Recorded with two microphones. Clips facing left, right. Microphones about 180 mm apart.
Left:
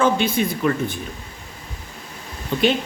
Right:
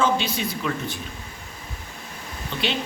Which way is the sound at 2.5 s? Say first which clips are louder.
Left 9 dB; 45° left (ahead or behind).